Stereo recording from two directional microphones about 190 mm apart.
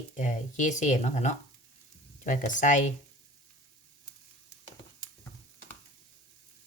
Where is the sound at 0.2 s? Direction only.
40° left (ahead or behind).